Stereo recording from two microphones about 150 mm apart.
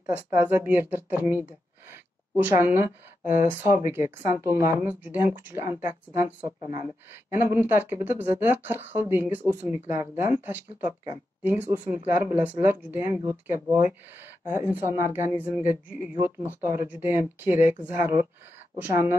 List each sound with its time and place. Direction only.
0.4 s speech: 10° right (ahead or behind)
3.7 s speech: 20° right (ahead or behind)
18.8 s speech: 20° right (ahead or behind)